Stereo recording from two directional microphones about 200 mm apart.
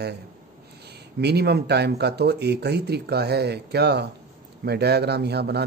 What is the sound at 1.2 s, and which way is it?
A man's voice, 55° right (ahead or behind).